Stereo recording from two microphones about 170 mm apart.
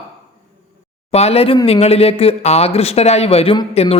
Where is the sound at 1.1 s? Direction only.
35° left (ahead or behind).